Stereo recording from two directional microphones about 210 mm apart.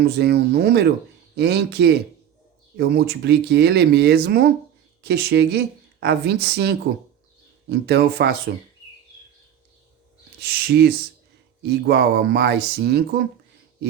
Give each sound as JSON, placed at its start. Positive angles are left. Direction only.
{"t": 0.0, "sound": "a woman's voice", "side_deg": -50}
{"t": 10.4, "sound": "a woman's voice", "side_deg": -50}